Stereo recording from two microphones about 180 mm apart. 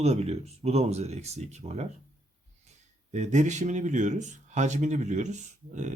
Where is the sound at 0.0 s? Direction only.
35° right (ahead or behind).